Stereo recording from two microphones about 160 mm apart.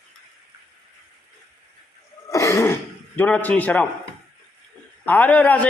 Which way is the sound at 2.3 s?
20° left (ahead or behind).